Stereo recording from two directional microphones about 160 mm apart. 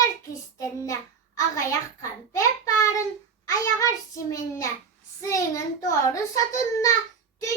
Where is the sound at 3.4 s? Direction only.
20° left (ahead or behind).